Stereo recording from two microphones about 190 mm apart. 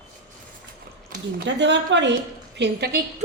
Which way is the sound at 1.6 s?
70° right (ahead or behind).